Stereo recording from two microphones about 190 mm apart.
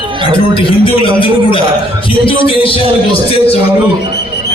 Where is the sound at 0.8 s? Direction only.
25° left (ahead or behind).